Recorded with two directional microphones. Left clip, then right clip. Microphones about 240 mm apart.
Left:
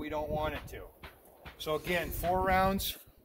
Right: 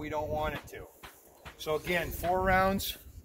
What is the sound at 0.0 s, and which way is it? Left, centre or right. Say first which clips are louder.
Speech: right 1 dB; centre.